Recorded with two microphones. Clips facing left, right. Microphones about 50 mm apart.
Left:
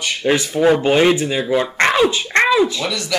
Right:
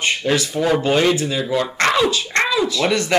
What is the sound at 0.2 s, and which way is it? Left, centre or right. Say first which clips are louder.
Speech: left 3 dB; left.